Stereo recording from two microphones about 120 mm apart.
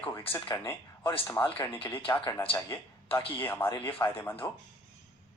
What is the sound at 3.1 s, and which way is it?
Speech, 45° left (ahead or behind).